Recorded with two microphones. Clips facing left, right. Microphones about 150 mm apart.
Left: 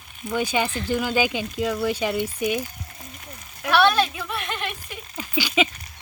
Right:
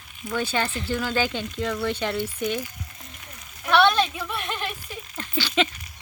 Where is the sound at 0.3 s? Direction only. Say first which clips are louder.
Left 2 dB; 15° left (ahead or behind).